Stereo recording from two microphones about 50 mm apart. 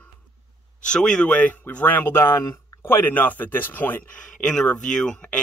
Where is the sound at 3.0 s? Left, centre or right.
Left.